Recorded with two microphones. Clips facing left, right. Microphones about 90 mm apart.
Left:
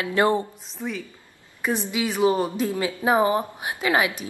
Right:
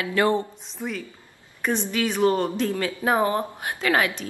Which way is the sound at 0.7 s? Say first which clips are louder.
Even; centre (ahead or behind).